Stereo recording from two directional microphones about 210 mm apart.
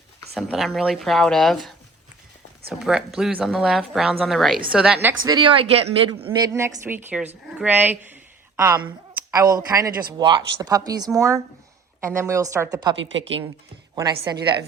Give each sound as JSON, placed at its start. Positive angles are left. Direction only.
{"t": 0.3, "sound": "a woman's voice", "side_deg": 0}
{"t": 2.6, "sound": "a woman's voice", "side_deg": -5}
{"t": 5.0, "sound": "a woman's voice", "side_deg": -20}
{"t": 13.0, "sound": "a woman's voice", "side_deg": -60}
{"t": 13.9, "sound": "a woman's voice", "side_deg": -20}